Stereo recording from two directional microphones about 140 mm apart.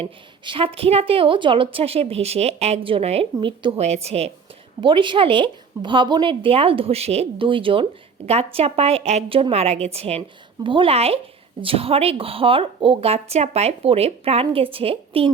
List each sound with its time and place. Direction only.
0.0 s a woman's voice: 40° right (ahead or behind)
3.8 s a woman's voice: 50° right (ahead or behind)
4.8 s a woman's voice: 35° right (ahead or behind)